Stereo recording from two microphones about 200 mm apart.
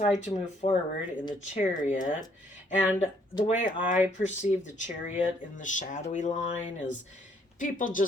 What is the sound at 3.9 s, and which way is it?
Speech, 35° left (ahead or behind).